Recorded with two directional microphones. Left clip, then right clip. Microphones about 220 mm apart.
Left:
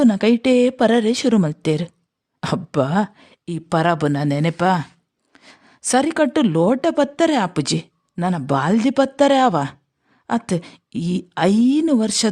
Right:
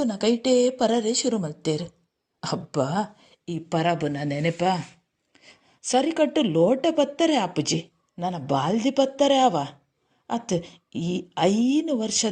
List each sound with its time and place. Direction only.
0.0 s a man's voice: 30° left (ahead or behind)